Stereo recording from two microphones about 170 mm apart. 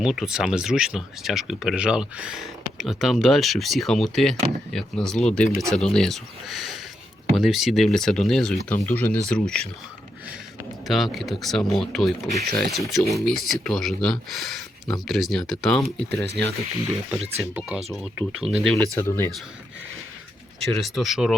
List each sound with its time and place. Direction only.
0.0 s speech: 5° right (ahead or behind)
10.8 s speech: centre (ahead or behind)
17.5 s speech: 5° right (ahead or behind)
18.9 s speech: 15° left (ahead or behind)
20.6 s speech: centre (ahead or behind)